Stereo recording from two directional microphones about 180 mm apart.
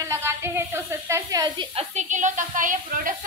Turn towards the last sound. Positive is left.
turn(degrees=-45)  # may be behind; listen again after turning